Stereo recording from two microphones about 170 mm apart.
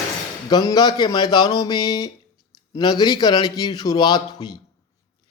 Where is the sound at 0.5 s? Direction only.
25° left (ahead or behind).